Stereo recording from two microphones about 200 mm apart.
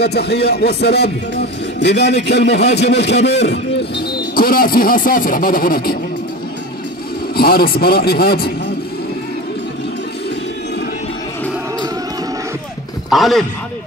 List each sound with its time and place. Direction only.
0.0 s speech: 55° left (ahead or behind)
4.4 s a man's voice: 45° left (ahead or behind)
7.3 s a man's voice: 50° left (ahead or behind)
13.1 s speech: centre (ahead or behind)